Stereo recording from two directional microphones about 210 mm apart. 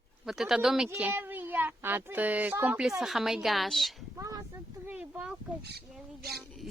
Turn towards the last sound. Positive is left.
turn(degrees=0)  # may be behind; listen again after turning